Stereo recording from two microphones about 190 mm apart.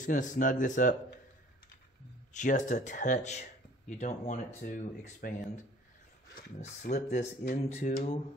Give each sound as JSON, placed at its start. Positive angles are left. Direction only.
{"t": 0.0, "sound": "speech", "side_deg": 40}
{"t": 2.3, "sound": "speech", "side_deg": 40}